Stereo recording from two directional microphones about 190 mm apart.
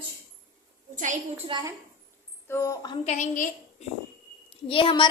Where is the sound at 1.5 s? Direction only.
25° right (ahead or behind).